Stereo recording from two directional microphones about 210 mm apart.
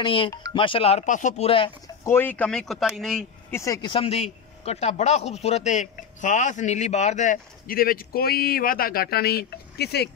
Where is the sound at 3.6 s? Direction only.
20° left (ahead or behind).